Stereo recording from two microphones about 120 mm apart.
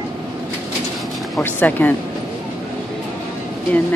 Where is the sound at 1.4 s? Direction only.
15° left (ahead or behind).